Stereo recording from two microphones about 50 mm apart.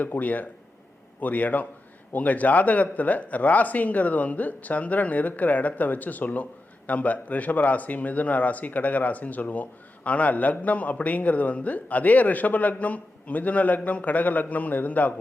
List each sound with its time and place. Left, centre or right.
0.0 s speech: left